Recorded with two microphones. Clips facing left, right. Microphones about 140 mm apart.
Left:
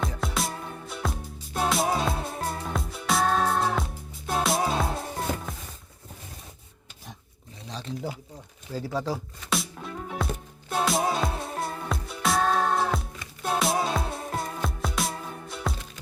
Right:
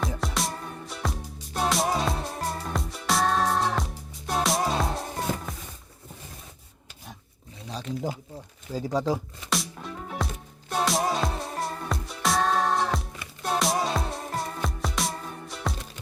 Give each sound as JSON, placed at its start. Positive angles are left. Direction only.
{"t": 0.2, "sound": "music", "side_deg": 0}
{"t": 7.7, "sound": "wild animals", "side_deg": -10}
{"t": 8.7, "sound": "speech", "side_deg": -15}
{"t": 9.5, "sound": "music", "side_deg": 0}